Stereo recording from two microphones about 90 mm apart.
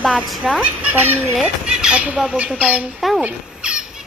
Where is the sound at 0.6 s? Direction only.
20° right (ahead or behind).